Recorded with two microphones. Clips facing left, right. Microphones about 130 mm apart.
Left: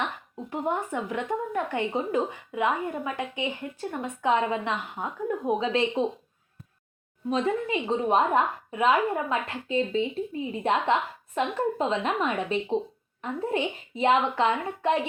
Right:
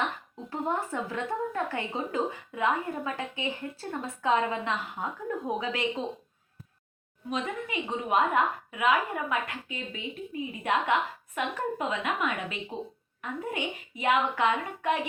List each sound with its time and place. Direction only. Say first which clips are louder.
0.5 s a woman's voice: left 2 dB; 15° left (ahead or behind)
7.3 s a woman's voice: left 7 dB; 30° left (ahead or behind)